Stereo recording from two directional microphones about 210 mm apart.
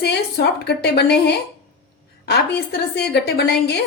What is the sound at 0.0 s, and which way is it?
A woman's voice, 50° left (ahead or behind).